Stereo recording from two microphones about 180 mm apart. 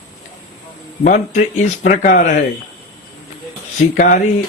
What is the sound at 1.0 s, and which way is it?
Speech, 45° left (ahead or behind).